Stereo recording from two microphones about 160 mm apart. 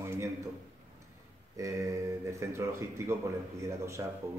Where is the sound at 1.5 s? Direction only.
20° right (ahead or behind).